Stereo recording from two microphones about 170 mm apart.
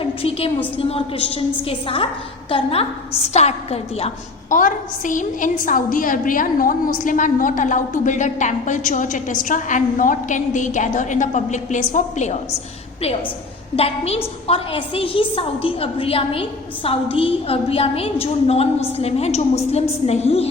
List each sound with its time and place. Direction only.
0.0 s a sound: 35° left (ahead or behind)
0.8 s a woman's voice: 35° left (ahead or behind)
13.7 s a woman's voice: 35° left (ahead or behind)